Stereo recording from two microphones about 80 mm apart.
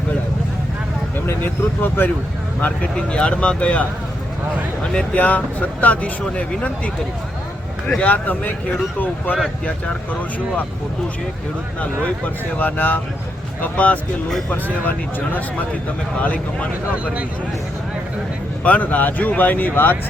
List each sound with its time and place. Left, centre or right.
1.3 s speech: left
12.0 s speech: left
18.6 s speech: centre